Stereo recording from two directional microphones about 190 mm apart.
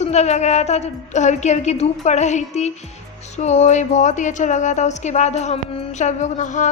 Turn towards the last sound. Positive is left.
turn(degrees=40)  # may be behind; listen again after turning